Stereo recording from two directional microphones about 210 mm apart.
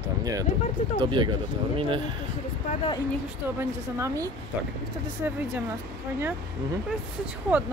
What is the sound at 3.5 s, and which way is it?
Speech, 15° right (ahead or behind).